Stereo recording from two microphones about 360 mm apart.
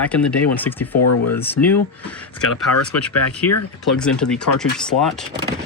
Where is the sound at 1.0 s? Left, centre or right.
Left.